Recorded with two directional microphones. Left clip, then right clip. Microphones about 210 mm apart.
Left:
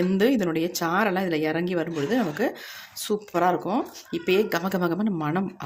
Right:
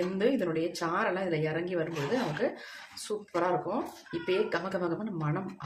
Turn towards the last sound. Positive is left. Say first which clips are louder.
# left 8 dB
turn(degrees=50)  # may be behind; listen again after turning